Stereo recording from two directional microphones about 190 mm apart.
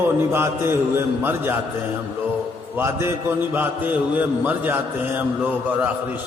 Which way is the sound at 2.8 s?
15° right (ahead or behind).